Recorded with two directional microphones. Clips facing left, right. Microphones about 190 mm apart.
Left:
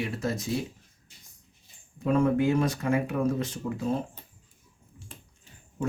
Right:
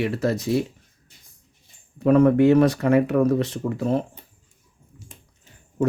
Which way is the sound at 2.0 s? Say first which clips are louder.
Right 8 dB; 65° right (ahead or behind).